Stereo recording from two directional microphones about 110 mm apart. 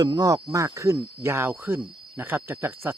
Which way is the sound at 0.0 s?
35° right (ahead or behind).